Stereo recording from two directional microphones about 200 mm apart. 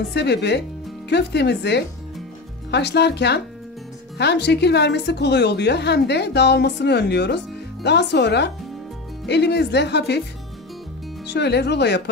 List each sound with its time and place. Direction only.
0.1 s a woman's voice: 55° left (ahead or behind)
11.2 s a woman's voice: 55° left (ahead or behind)